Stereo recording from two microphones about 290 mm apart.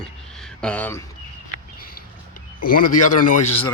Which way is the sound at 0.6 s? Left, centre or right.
Centre.